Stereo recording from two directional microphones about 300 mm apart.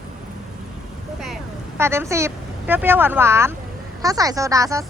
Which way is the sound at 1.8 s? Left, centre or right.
Centre.